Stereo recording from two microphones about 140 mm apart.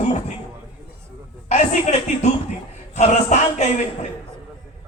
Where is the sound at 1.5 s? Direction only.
55° left (ahead or behind).